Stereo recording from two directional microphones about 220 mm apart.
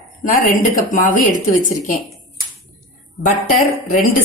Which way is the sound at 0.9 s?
35° left (ahead or behind).